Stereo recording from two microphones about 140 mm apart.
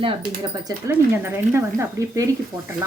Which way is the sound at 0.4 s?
30° right (ahead or behind).